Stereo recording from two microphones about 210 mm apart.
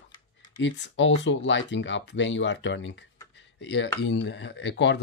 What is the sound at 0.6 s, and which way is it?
Speech, 60° left (ahead or behind).